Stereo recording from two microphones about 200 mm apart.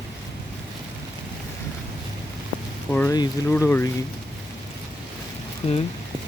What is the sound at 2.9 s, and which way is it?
Speech, 15° left (ahead or behind).